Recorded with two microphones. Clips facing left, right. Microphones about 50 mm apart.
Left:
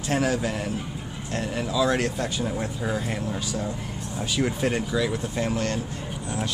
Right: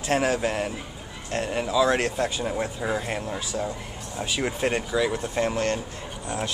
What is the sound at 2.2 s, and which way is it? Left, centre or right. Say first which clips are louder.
Speech: right 1 dB; centre.